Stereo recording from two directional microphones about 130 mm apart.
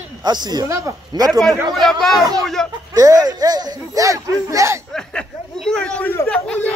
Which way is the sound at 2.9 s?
30° right (ahead or behind).